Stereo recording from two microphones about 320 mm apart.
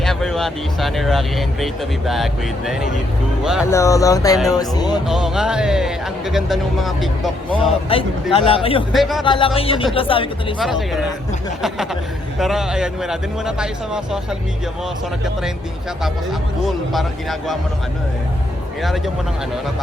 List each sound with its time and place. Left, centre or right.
0.0 s speech: centre
3.7 s speech: centre
5.0 s speech: centre
7.9 s speech: centre
8.9 s speech: centre
9.2 s speech: centre
10.6 s speech: centre
12.4 s speech: centre
16.6 s speech: centre
18.8 s speech: centre